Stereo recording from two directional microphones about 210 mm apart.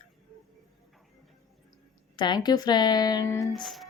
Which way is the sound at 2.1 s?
20° left (ahead or behind).